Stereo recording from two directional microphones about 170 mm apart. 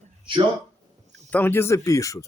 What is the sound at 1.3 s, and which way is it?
Speech, 10° left (ahead or behind).